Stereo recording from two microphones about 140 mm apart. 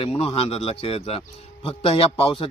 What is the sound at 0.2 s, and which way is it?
Speech, 45° left (ahead or behind).